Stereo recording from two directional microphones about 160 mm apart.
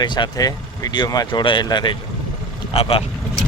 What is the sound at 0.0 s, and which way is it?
Speech, 25° left (ahead or behind).